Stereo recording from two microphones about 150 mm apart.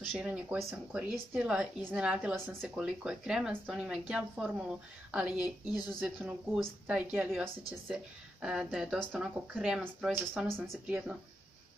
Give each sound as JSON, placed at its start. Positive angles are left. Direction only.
{"t": 0.0, "sound": "speech", "side_deg": -5}